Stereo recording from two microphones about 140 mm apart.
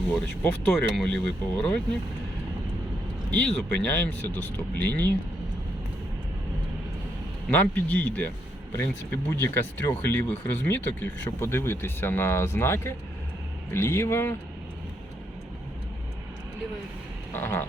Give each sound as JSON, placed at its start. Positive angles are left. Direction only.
{"t": 0.1, "sound": "speech", "side_deg": 5}
{"t": 3.3, "sound": "speech", "side_deg": 5}
{"t": 7.5, "sound": "speech", "side_deg": 10}
{"t": 9.3, "sound": "speech", "side_deg": 15}
{"t": 17.3, "sound": "speech", "side_deg": 15}